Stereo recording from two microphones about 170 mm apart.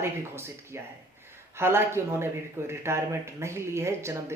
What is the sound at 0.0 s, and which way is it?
Speech, 15° right (ahead or behind).